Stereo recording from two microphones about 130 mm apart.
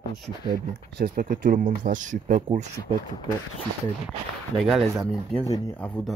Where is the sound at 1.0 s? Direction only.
90° right; by 2.6 s 70° right (ahead or behind).